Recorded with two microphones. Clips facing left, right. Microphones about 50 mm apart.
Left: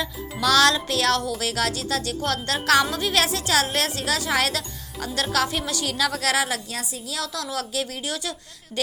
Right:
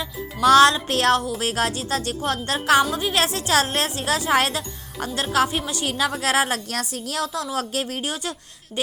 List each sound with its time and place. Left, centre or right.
0.4 s speech: right
0.9 s speech: right; by 3.2 s centre
3.2 s speech: right
5.1 s speech: centre
5.8 s speech: right
6.7 s a woman's voice: right
7.5 s speech: right